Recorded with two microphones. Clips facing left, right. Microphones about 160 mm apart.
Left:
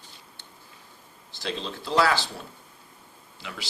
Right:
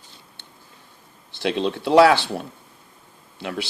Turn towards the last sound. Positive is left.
turn(degrees=-60)  # may be behind; listen again after turning